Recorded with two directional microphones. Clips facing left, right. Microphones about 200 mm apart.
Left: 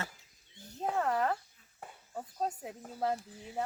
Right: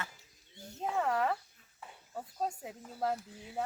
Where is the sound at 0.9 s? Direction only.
Centre (ahead or behind).